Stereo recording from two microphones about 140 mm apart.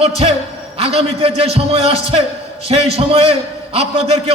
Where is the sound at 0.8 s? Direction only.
45° right (ahead or behind).